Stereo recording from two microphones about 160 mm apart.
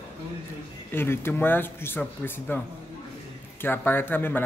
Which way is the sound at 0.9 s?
15° left (ahead or behind).